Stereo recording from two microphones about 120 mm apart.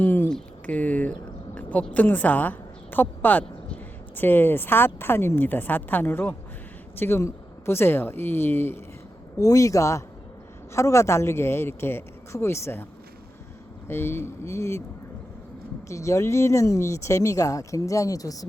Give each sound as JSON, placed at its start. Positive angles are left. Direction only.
{"t": 0.0, "sound": "a sound", "side_deg": 20}
{"t": 0.3, "sound": "a woman's voice", "side_deg": 10}
{"t": 13.8, "sound": "speech", "side_deg": 20}
{"t": 15.9, "sound": "speech", "side_deg": 25}